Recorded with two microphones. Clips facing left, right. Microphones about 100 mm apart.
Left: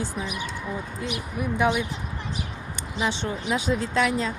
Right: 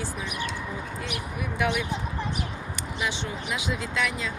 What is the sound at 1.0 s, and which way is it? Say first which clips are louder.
Speech: left 7 dB; 25° left (ahead or behind).